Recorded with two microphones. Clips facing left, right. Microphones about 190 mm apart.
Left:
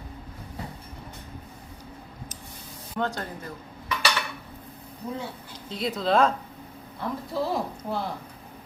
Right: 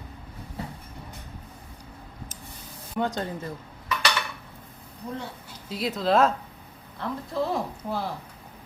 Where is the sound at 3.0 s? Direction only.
20° right (ahead or behind).